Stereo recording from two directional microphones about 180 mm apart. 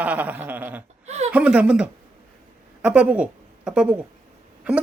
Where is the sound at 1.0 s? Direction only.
40° right (ahead or behind).